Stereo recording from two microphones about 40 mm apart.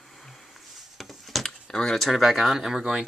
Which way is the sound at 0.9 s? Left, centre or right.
Centre.